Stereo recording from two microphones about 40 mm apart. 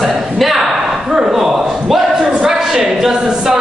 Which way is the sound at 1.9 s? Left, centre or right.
Centre.